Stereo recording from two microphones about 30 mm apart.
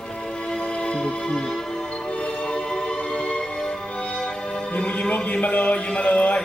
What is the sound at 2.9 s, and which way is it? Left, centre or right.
Music, left.